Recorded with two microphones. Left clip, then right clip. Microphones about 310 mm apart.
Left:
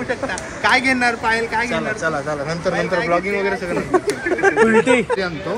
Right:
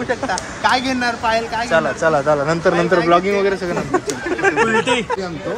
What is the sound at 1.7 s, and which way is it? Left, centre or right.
A man's voice, right.